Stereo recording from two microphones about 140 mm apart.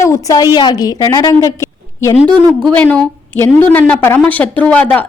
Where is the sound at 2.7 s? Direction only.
10° left (ahead or behind).